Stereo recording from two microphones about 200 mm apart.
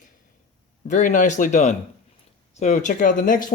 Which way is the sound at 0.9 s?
40° left (ahead or behind).